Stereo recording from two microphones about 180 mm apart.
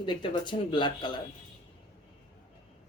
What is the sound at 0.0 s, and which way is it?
A woman's voice, 25° left (ahead or behind).